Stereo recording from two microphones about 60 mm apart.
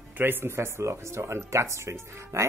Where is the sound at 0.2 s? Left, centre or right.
Right.